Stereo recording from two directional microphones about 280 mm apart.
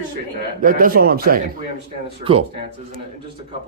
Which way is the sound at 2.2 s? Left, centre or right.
Right.